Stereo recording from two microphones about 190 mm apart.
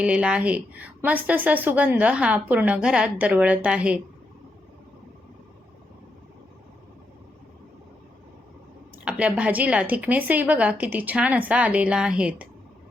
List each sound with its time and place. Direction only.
0.0 s a woman's voice: 5° right (ahead or behind)
9.0 s a woman's voice: 5° right (ahead or behind)